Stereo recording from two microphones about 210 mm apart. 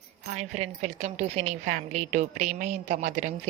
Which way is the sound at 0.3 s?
35° right (ahead or behind).